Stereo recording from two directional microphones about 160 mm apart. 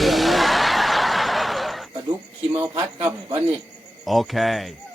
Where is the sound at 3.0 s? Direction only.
25° right (ahead or behind).